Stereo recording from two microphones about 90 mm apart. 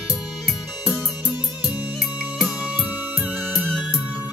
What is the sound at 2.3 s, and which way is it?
Music, 5° right (ahead or behind).